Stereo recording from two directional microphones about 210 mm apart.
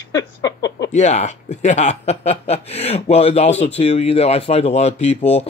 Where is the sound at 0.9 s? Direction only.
35° left (ahead or behind).